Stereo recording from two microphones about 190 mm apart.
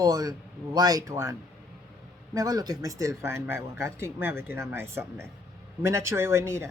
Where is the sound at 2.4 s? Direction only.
20° right (ahead or behind).